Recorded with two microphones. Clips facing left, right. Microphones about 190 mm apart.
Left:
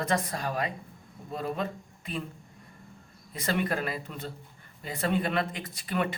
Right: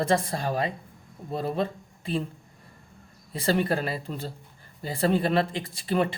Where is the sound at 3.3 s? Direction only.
30° right (ahead or behind).